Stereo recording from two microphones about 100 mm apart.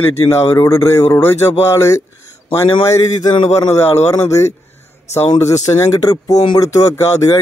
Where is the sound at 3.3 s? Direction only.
60° left (ahead or behind).